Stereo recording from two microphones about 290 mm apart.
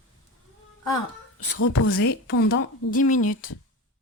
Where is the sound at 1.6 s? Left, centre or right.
Left.